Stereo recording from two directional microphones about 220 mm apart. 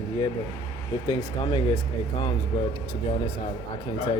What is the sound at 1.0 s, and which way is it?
Speech, 20° left (ahead or behind).